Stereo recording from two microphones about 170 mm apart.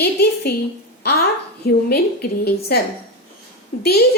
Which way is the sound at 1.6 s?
65° left (ahead or behind).